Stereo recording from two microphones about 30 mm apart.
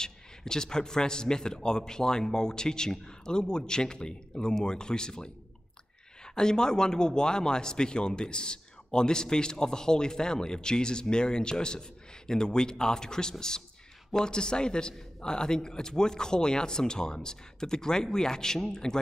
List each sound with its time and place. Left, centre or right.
0.0 s a man's voice: left